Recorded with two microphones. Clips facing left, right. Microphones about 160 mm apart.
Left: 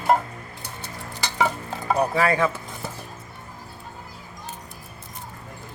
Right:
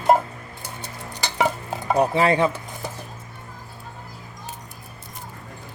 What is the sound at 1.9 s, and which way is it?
Speech, 25° right (ahead or behind).